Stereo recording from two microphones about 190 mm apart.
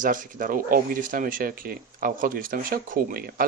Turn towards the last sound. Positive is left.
turn(degrees=-50)  # may be behind; listen again after turning